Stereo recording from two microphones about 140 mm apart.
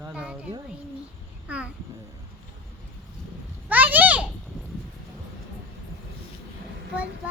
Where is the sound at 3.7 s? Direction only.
10° right (ahead or behind).